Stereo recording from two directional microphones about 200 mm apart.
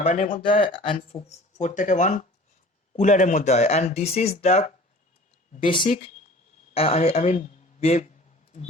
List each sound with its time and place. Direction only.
0.0 s speech: 30° left (ahead or behind)
5.8 s speech: 40° left (ahead or behind)
6.7 s speech: 30° left (ahead or behind)